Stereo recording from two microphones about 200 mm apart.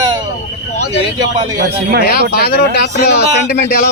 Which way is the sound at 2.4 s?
55° left (ahead or behind).